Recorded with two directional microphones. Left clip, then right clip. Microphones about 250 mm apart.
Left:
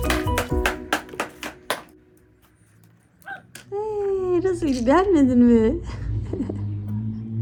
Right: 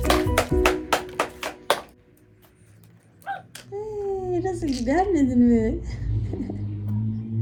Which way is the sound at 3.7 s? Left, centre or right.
Left.